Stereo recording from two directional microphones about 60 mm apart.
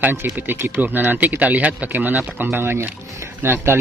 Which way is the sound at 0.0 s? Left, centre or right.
Right.